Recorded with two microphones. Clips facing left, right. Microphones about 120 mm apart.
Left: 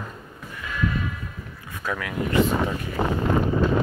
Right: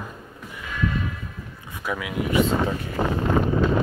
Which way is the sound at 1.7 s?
10° right (ahead or behind).